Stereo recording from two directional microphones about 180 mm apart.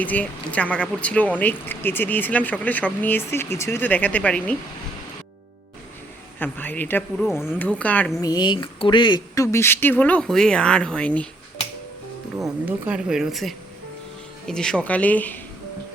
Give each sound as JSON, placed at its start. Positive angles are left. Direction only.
{"t": 0.0, "sound": "speech", "side_deg": 10}
{"t": 6.4, "sound": "speech", "side_deg": 10}
{"t": 8.2, "sound": "speech", "side_deg": 25}
{"t": 12.4, "sound": "speech", "side_deg": -10}